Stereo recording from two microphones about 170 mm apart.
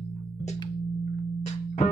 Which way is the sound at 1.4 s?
40° left (ahead or behind).